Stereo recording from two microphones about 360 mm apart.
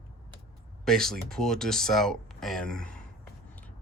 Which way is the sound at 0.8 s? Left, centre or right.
Centre.